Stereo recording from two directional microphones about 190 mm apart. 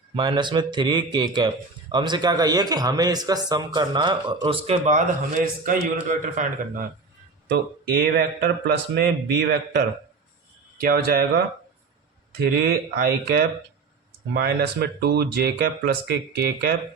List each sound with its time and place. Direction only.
0.1 s a man's voice: 25° right (ahead or behind); by 6.8 s 45° right (ahead or behind)
7.4 s a man's voice: 60° right (ahead or behind)